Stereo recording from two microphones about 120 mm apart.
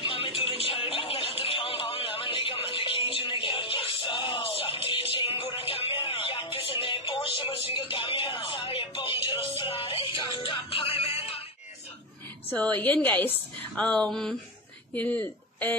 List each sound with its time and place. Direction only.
0.1 s music: 50° left (ahead or behind)
12.4 s a woman's voice: 10° left (ahead or behind)